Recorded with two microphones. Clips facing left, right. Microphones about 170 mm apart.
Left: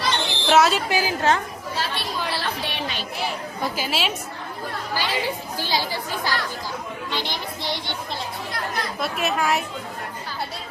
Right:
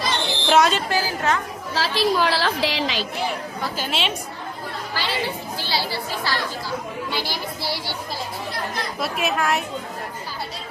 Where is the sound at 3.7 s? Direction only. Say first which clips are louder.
Right 1 dB; 5° left (ahead or behind).